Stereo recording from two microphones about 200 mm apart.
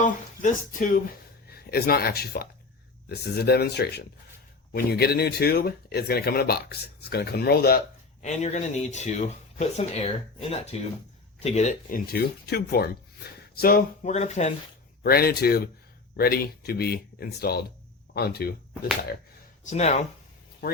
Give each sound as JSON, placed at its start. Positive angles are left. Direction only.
{"t": 0.0, "sound": "speech", "side_deg": 40}
{"t": 8.2, "sound": "speech", "side_deg": 35}
{"t": 14.0, "sound": "speech", "side_deg": 35}
{"t": 15.0, "sound": "speech", "side_deg": 50}
{"t": 19.6, "sound": "speech", "side_deg": 35}